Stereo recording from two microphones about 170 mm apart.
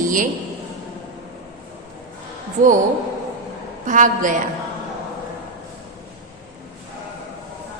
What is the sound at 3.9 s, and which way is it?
Speech, 50° right (ahead or behind).